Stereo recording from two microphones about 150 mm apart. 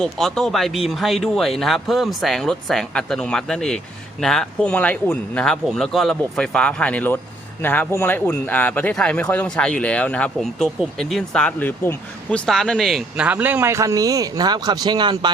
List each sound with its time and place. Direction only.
0.0 s a man's voice: centre (ahead or behind); by 15.3 s 30° right (ahead or behind)